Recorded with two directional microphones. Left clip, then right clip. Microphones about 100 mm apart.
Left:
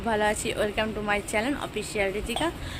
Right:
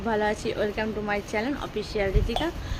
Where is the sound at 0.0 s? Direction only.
20° right (ahead or behind).